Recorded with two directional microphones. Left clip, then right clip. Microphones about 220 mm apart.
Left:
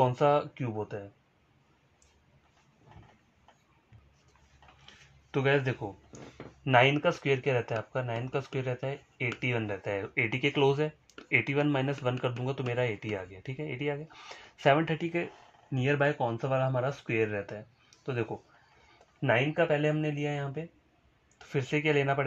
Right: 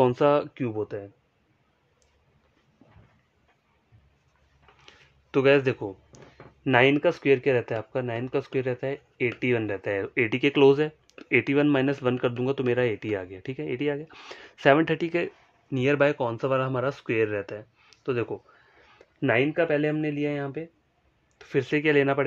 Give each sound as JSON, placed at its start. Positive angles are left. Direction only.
{"t": 0.0, "sound": "speech", "side_deg": -55}
{"t": 4.8, "sound": "a sound", "side_deg": -45}
{"t": 6.6, "sound": "speech", "side_deg": -55}
{"t": 15.7, "sound": "speech", "side_deg": -40}